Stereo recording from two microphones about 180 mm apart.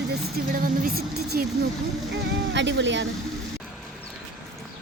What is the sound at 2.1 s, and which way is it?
Speech, 80° right.